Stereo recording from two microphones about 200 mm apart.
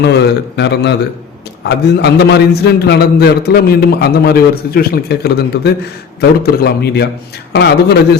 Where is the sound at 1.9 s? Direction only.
55° left (ahead or behind).